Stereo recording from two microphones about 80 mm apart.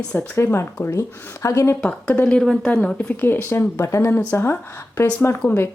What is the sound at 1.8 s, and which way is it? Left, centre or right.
Speech, centre.